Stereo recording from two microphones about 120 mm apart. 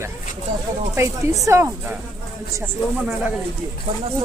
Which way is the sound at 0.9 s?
20° right (ahead or behind).